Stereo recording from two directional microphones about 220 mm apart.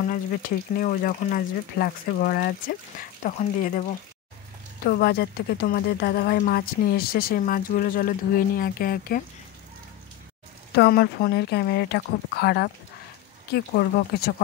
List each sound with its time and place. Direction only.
0.1 s speech: 40° left (ahead or behind)
4.8 s speech: 45° left (ahead or behind)
10.8 s speech: 45° left (ahead or behind)